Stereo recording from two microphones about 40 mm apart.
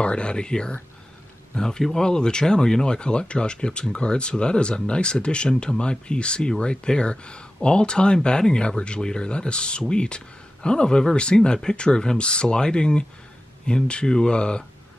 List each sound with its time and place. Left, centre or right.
0.0 s speech: left